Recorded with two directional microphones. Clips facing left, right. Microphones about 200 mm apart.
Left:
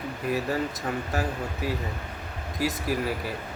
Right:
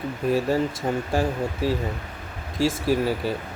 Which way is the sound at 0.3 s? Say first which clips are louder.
Right 5 dB; 30° right (ahead or behind).